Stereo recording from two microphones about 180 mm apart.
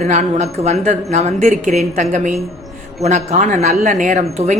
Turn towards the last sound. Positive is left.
turn(degrees=-40)  # may be behind; listen again after turning